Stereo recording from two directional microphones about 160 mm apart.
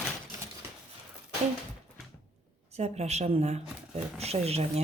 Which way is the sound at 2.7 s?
45° right (ahead or behind).